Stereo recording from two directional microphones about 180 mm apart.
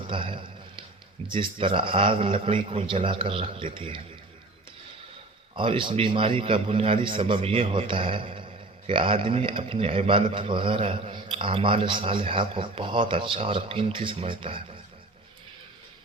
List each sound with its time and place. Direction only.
0.1 s a sound: 30° right (ahead or behind)
1.3 s a man's voice: 30° right (ahead or behind)
5.5 s a man's voice: 30° right (ahead or behind)